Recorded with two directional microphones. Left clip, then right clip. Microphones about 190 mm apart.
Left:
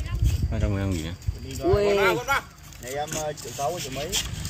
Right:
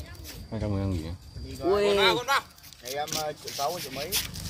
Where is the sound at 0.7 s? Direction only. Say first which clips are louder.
Left 3 dB; 5° right (ahead or behind).